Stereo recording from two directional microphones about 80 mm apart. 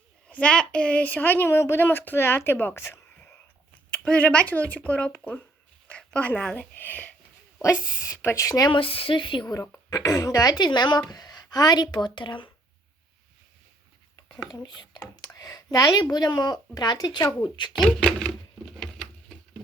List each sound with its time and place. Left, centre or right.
0.3 s a woman's voice: centre
3.9 s a woman's voice: centre
7.6 s a woman's voice: left
8.6 s speech: left
9.9 s speech: left
10.6 s speech: left
11.1 s a sound: left
11.5 s a woman's voice: left
14.5 s a woman's voice: left
17.8 s a sound: centre